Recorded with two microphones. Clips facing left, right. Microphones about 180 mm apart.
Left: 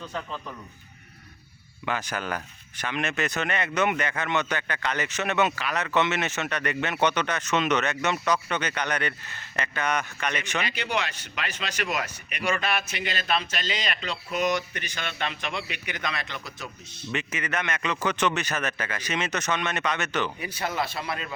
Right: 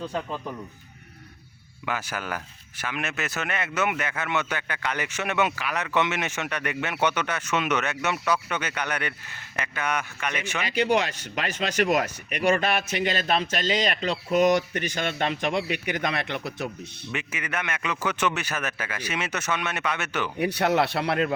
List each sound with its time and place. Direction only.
0.0 s speech: 30° right (ahead or behind)
1.8 s speech: 10° right (ahead or behind)
10.7 s speech: 45° right (ahead or behind); by 16.6 s 60° right (ahead or behind)
17.1 s speech: 10° right (ahead or behind)
20.4 s speech: 70° right (ahead or behind)